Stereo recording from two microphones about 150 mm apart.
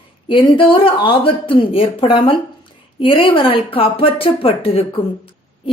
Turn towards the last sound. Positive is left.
turn(degrees=35)  # may be behind; listen again after turning